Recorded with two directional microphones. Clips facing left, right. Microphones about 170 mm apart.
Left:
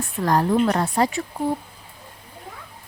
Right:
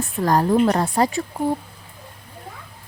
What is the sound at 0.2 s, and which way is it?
Speech, 35° right (ahead or behind).